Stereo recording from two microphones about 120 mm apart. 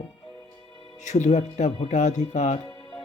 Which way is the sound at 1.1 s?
80° left.